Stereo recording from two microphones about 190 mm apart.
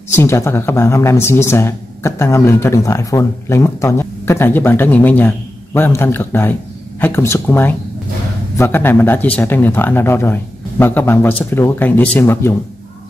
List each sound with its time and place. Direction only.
0.1 s speech: 15° left (ahead or behind)